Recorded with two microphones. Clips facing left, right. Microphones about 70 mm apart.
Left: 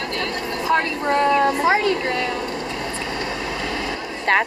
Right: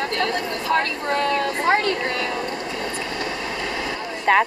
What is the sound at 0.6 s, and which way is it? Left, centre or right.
Speech, left.